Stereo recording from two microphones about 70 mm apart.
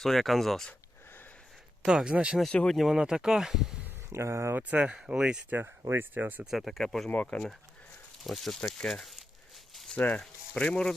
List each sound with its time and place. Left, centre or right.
0.0 s speech: centre
0.7 s a sound: left
1.8 s speech: centre
2.5 s speech: centre
2.7 s speech: centre
4.1 s speech: right
4.5 s speech: right
5.5 s speech: right
6.4 s speech: centre
7.1 s speech: left
8.2 s speech: centre
9.9 s speech: left